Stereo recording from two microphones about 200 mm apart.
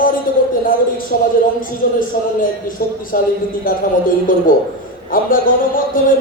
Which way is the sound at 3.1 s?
45° left (ahead or behind).